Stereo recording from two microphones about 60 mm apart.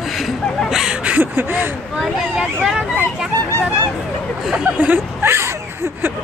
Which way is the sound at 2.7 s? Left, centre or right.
Centre.